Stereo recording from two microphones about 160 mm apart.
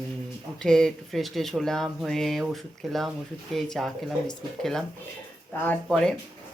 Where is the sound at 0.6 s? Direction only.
5° left (ahead or behind).